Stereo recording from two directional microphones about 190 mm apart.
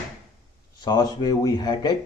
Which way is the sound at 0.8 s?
20° left (ahead or behind).